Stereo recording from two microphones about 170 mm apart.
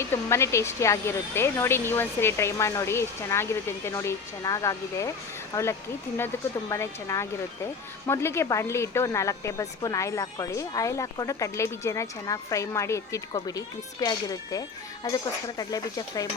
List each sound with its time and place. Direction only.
0.0 s speech: 15° left (ahead or behind)